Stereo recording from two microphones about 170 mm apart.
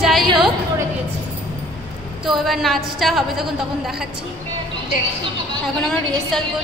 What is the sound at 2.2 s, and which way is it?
A woman's voice, centre (ahead or behind).